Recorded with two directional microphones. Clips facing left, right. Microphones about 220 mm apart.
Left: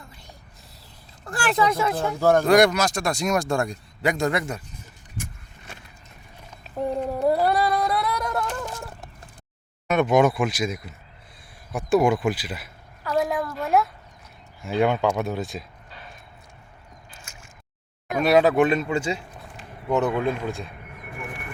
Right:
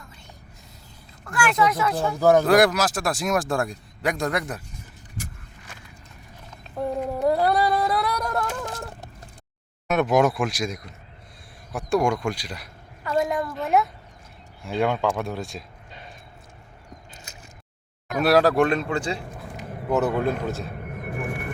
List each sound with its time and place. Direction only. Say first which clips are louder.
1.2 s speech: right 1 dB; 30° left (ahead or behind)
2.1 s speech: even; centre (ahead or behind)
6.7 s a sound: left 1 dB; 5° right (ahead or behind)
9.8 s speech: left 1 dB; centre (ahead or behind)
18.2 s speech: left 1 dB; centre (ahead or behind)
19.9 s speech: even; 5° right (ahead or behind)
20.7 s vehicle: right 8 dB; 45° right (ahead or behind)